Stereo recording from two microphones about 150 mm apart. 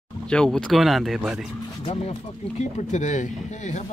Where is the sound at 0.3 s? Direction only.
5° left (ahead or behind).